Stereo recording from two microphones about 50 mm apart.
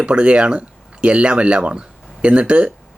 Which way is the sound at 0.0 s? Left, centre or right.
Right.